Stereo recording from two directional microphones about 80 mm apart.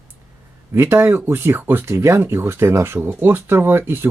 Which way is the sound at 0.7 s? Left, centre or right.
Right.